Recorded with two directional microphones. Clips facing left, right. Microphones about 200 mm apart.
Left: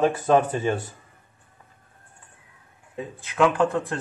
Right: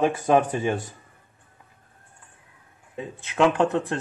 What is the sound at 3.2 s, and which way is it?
Speech, 25° right (ahead or behind).